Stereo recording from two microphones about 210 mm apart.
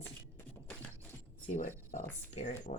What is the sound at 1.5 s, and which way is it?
Speech, 35° left (ahead or behind).